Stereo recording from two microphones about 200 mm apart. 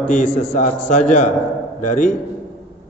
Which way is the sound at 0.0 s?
40° left (ahead or behind).